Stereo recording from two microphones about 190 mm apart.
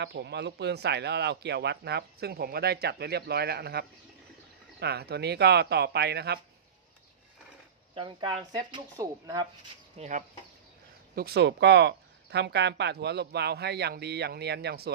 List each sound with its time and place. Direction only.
0.0 s speech: 65° right (ahead or behind)
7.9 s speech: 25° right (ahead or behind)
10.0 s speech: 40° right (ahead or behind)
11.1 s speech: 55° right (ahead or behind)